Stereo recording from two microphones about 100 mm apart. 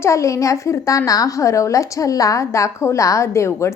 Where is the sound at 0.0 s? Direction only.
30° left (ahead or behind).